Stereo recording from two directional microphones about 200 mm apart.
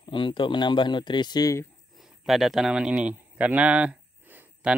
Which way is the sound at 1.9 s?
Centre (ahead or behind).